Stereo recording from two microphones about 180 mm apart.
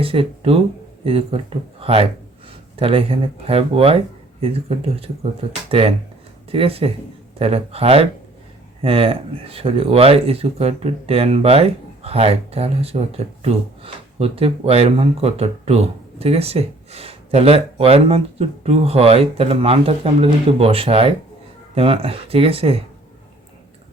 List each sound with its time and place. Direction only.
0.0 s speech: 30° right (ahead or behind)